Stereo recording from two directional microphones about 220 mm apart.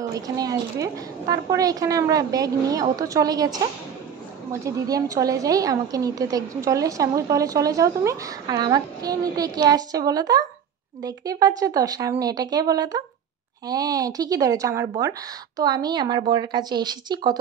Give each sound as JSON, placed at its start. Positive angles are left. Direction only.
{"t": 0.0, "sound": "a woman's voice", "side_deg": -15}